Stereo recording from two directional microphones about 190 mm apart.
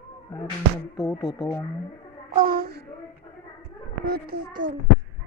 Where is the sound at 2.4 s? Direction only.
50° right (ahead or behind).